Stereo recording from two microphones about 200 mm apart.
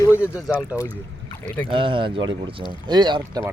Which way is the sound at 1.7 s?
25° right (ahead or behind).